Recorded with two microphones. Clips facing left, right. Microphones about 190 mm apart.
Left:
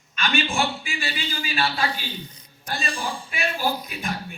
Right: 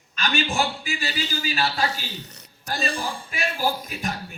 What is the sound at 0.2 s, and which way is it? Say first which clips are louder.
A man's voice: even; 40° right (ahead or behind).